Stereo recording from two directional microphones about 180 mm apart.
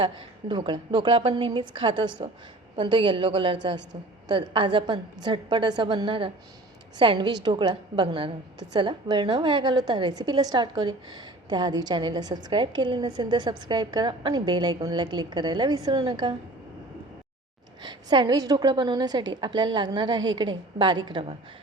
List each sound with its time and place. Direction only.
0.0 s a woman's voice: 25° right (ahead or behind)
17.8 s a woman's voice: 25° right (ahead or behind)